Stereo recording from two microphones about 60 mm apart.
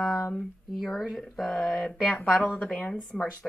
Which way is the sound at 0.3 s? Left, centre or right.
Centre.